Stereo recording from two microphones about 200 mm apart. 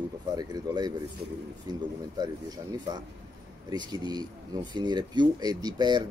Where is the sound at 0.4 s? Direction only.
20° right (ahead or behind).